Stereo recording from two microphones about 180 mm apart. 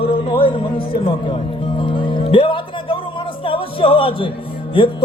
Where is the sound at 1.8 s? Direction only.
25° left (ahead or behind).